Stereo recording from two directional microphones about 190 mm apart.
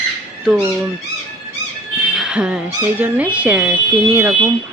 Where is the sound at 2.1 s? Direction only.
5° right (ahead or behind).